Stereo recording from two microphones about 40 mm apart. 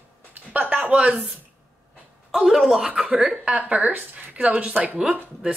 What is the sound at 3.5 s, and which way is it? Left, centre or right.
Speech, right.